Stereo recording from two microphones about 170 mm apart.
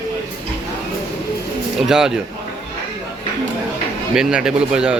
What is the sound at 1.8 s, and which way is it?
Speech, 5° right (ahead or behind).